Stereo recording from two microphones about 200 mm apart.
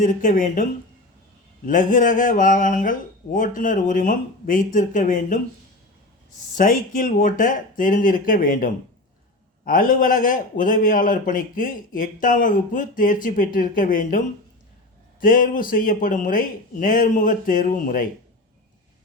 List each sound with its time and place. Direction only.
0.0 s speech: 40° left (ahead or behind)
1.6 s speech: 40° left (ahead or behind)
6.6 s a man's voice: 40° left (ahead or behind)
15.2 s a man's voice: 45° left (ahead or behind)